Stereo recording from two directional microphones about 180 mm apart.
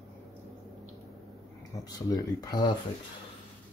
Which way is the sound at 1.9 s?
20° left (ahead or behind).